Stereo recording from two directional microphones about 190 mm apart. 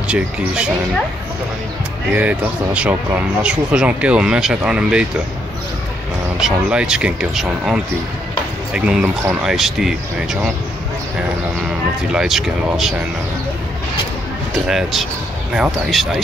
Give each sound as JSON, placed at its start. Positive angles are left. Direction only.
{"t": 0.1, "sound": "speech", "side_deg": -5}
{"t": 2.1, "sound": "speech", "side_deg": -5}
{"t": 6.4, "sound": "speech", "side_deg": -5}
{"t": 12.1, "sound": "speech", "side_deg": 0}
{"t": 14.5, "sound": "speech", "side_deg": 0}